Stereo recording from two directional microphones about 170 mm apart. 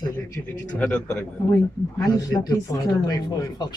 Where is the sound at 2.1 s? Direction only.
20° left (ahead or behind).